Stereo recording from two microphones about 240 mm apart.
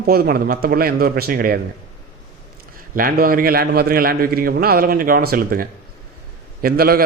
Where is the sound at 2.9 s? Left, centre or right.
Right.